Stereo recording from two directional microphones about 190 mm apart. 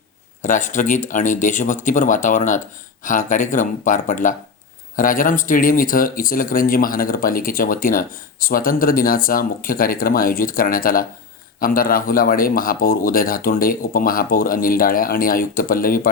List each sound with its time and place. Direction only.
0.4 s speech: 45° left (ahead or behind)